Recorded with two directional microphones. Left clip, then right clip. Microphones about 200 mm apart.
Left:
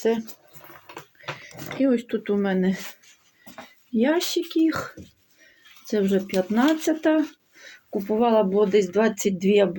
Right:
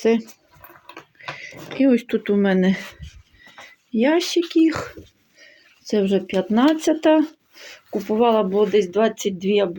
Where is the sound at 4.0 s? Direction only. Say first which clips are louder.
Right 4 dB; 30° right (ahead or behind).